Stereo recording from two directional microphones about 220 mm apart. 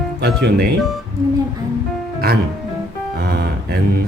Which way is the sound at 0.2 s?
45° right (ahead or behind).